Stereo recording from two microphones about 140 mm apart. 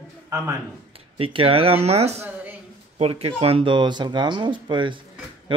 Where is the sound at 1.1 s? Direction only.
40° right (ahead or behind).